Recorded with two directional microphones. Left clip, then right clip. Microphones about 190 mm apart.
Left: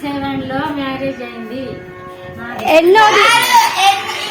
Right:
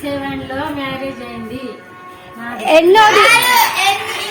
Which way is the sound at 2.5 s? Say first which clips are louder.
Even; 5° right (ahead or behind).